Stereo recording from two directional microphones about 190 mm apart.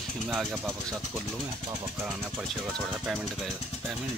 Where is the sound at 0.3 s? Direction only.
5° right (ahead or behind).